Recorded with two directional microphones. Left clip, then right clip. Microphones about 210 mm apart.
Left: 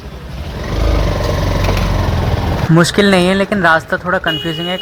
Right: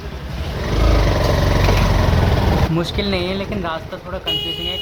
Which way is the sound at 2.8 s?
25° left (ahead or behind).